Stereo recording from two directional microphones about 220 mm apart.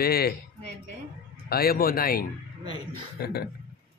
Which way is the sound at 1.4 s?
45° left (ahead or behind).